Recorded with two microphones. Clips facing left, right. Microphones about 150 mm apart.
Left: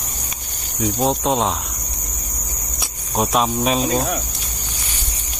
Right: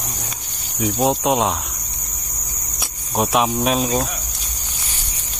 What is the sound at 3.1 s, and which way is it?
Speech, centre (ahead or behind).